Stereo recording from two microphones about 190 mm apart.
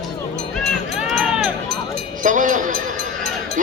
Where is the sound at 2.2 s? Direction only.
40° right (ahead or behind).